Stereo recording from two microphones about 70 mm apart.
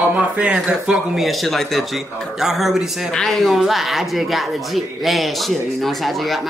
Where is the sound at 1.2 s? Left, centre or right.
Centre.